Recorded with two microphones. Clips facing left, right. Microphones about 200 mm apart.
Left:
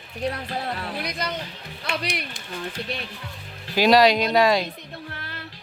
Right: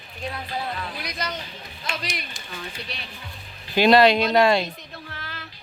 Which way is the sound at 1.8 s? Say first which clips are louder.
Left 4 dB; 60° left (ahead or behind).